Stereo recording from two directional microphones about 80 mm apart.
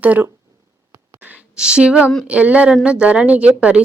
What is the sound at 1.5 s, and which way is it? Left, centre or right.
Speech, centre.